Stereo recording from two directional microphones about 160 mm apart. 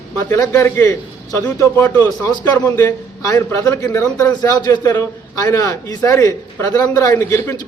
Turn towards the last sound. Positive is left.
turn(degrees=15)  # may be behind; listen again after turning